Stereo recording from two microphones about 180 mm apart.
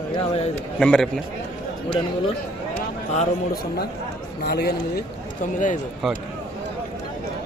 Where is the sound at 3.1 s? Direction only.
55° left (ahead or behind).